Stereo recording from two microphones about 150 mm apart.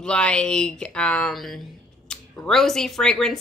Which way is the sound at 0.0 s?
5° left (ahead or behind).